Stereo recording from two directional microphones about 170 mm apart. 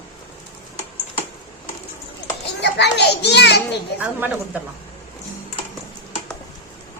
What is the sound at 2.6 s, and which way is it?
A child's voice, 80° left.